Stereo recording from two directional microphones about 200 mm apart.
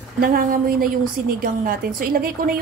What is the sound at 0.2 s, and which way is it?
A woman's voice, 45° right (ahead or behind).